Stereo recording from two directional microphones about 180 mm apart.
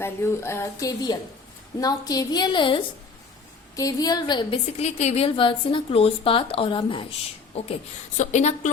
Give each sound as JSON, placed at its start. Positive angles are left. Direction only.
{"t": 0.0, "sound": "a woman's voice", "side_deg": 15}
{"t": 4.8, "sound": "speech", "side_deg": 40}
{"t": 8.2, "sound": "speech", "side_deg": 40}